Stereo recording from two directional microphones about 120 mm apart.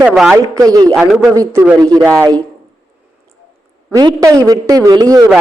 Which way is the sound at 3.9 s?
35° right (ahead or behind).